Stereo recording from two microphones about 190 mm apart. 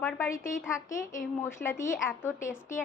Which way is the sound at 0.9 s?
45° left (ahead or behind).